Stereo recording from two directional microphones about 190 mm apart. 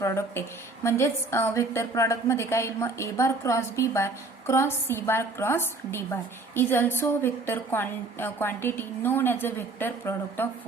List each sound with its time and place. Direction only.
0.0 s a woman's voice: 15° left (ahead or behind)